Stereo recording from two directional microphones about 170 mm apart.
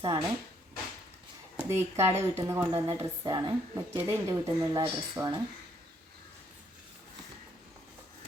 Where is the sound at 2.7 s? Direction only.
30° right (ahead or behind).